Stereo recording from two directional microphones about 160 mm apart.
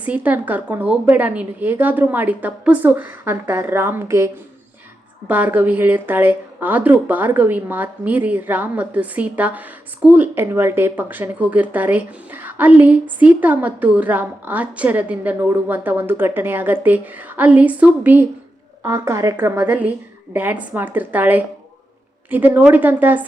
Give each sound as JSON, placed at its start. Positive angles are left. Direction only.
{"t": 0.0, "sound": "a woman's voice", "side_deg": -10}
{"t": 5.3, "sound": "a woman's voice", "side_deg": -10}